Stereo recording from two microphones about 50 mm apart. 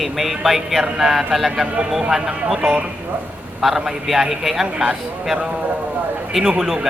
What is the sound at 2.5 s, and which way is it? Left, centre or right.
Speech, centre.